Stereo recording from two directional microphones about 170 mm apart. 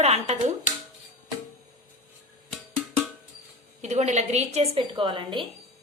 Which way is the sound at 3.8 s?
40° right (ahead or behind).